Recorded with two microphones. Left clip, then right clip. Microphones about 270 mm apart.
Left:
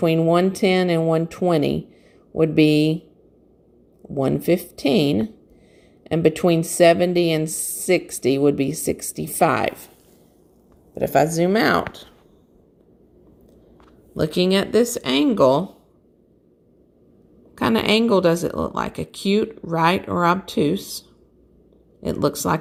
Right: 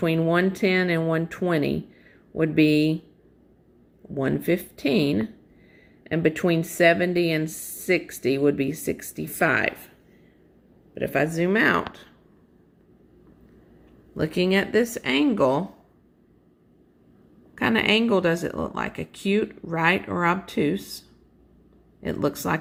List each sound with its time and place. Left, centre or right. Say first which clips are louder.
0.0 s speech: left 5 dB; centre
4.1 s speech: left 4 dB; centre
10.9 s speech: left 6 dB; centre
14.2 s speech: left 3 dB; left
17.6 s speech: left 2 dB; left
22.0 s speech: left 4 dB; centre